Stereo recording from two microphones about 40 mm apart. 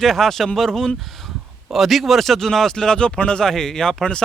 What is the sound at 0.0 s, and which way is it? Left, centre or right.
Speech, centre.